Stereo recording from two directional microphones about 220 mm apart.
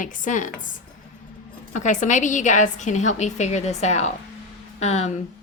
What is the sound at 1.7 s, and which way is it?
A woman's voice, 35° left (ahead or behind).